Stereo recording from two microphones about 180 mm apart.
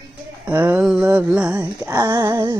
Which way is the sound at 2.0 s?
20° right (ahead or behind).